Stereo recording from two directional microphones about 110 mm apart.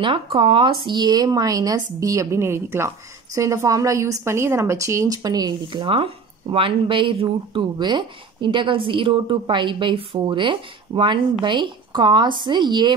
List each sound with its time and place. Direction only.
0.0 s a woman's voice: 50° right (ahead or behind)